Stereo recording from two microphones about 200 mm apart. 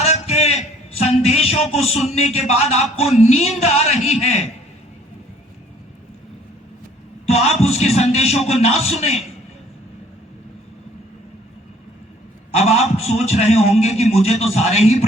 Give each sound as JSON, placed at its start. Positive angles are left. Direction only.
{"t": 0.0, "sound": "a man's voice", "side_deg": 30}
{"t": 7.3, "sound": "a man's voice", "side_deg": 30}
{"t": 12.5, "sound": "a man's voice", "side_deg": 30}